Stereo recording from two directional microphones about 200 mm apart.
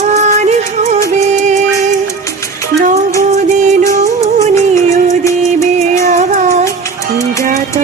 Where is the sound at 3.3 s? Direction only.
40° right (ahead or behind).